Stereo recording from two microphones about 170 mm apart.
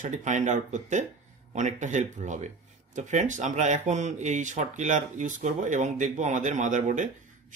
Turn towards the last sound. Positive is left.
turn(degrees=-50)  # may be behind; listen again after turning